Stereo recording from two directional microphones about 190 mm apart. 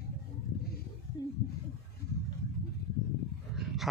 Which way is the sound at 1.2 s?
20° left (ahead or behind).